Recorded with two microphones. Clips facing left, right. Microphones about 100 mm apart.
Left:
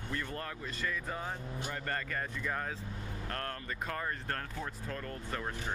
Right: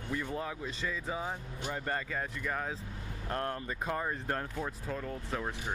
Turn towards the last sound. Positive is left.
turn(degrees=-5)  # may be behind; listen again after turning